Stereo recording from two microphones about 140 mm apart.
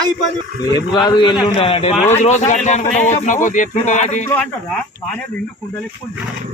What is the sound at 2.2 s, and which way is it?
Speech, 60° left (ahead or behind).